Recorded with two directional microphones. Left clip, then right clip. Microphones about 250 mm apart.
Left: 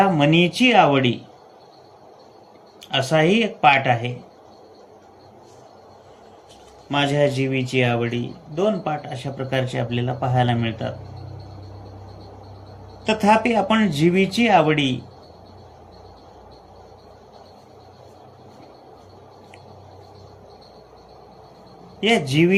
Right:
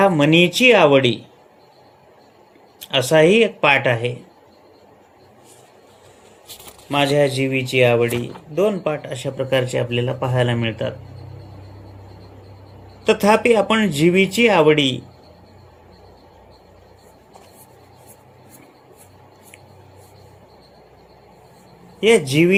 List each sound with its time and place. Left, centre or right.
0.0 s a man's voice: right
2.9 s a man's voice: right
6.9 s a man's voice: right
13.2 s a man's voice: right
22.3 s a man's voice: right